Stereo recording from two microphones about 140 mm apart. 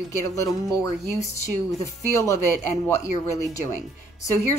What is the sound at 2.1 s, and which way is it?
Speech, 20° left (ahead or behind).